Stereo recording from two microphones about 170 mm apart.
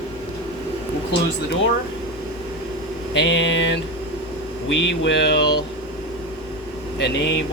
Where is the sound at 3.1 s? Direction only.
90° left.